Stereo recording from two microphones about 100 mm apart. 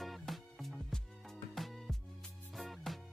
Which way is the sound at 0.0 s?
Centre (ahead or behind).